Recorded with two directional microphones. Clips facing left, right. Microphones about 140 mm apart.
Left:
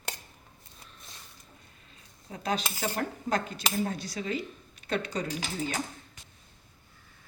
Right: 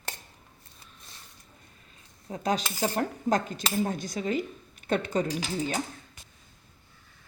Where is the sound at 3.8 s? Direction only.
45° right (ahead or behind).